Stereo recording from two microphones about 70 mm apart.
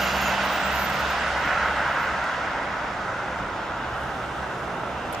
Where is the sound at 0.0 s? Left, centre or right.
Centre.